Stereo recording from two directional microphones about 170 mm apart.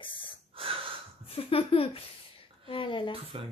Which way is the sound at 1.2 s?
35° left (ahead or behind).